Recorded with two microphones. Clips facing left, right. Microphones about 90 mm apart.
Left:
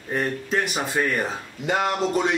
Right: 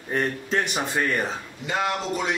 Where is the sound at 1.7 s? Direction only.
45° left (ahead or behind).